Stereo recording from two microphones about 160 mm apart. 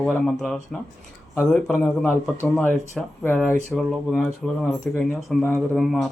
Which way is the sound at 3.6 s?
Centre (ahead or behind).